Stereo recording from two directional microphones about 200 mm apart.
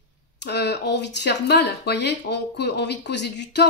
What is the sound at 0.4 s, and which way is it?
Speech, 60° left (ahead or behind).